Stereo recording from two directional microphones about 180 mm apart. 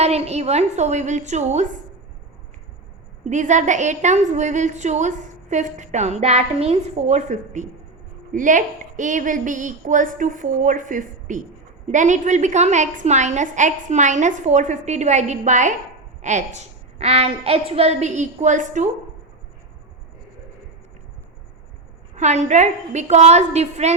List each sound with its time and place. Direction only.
0.0 s a woman's voice: 35° right (ahead or behind)
3.2 s a woman's voice: 40° right (ahead or behind)
22.1 s a woman's voice: 40° right (ahead or behind)